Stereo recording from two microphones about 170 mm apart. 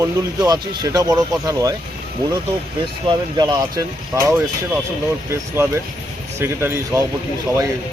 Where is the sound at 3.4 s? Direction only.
25° right (ahead or behind).